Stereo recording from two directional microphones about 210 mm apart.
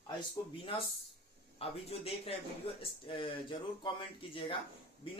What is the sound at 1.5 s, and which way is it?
Speech, 25° left (ahead or behind).